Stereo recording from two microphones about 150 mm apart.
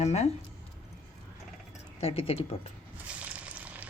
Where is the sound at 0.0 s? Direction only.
45° left (ahead or behind).